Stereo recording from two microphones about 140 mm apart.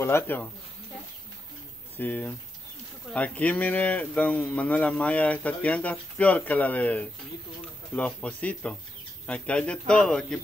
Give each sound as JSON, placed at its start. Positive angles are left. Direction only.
{"t": 0.0, "sound": "speech", "side_deg": 15}
{"t": 2.0, "sound": "speech", "side_deg": 10}